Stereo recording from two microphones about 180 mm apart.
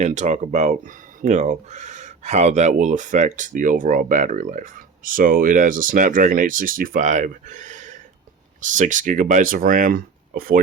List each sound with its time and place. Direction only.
0.0 s speech: 40° right (ahead or behind)